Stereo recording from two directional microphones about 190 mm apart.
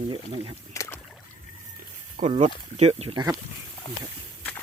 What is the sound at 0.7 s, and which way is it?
Rowboat, 15° left (ahead or behind).